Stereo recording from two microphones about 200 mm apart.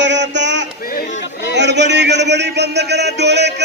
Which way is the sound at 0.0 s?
60° right (ahead or behind).